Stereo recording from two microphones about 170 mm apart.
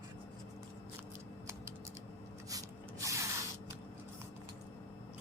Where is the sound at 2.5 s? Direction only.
20° right (ahead or behind).